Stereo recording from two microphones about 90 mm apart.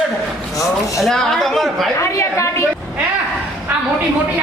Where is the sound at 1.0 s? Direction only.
5° left (ahead or behind).